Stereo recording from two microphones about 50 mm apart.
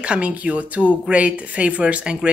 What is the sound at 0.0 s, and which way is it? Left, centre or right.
Speech, right.